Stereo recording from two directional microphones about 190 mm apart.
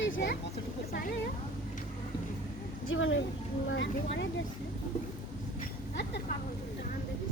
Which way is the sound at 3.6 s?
70° left (ahead or behind).